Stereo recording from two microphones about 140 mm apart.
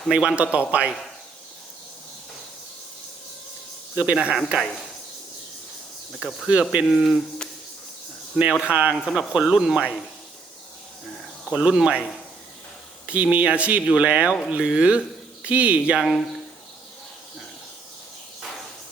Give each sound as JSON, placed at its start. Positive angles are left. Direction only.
{"t": 0.1, "sound": "speech", "side_deg": -10}
{"t": 3.9, "sound": "speech", "side_deg": -10}
{"t": 6.1, "sound": "speech", "side_deg": -5}
{"t": 11.5, "sound": "speech", "side_deg": -10}
{"t": 13.1, "sound": "speech", "side_deg": -10}